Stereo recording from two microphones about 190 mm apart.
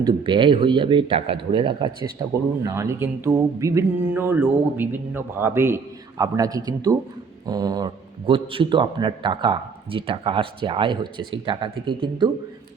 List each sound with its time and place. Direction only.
0.0 s a man's voice: 25° right (ahead or behind)
2.6 s a man's voice: 15° right (ahead or behind)